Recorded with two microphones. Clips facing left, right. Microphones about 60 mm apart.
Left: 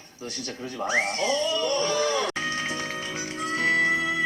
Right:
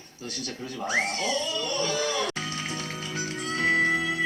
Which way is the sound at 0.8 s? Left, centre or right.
Left.